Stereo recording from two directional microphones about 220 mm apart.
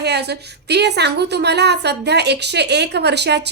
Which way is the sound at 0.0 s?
50° right (ahead or behind).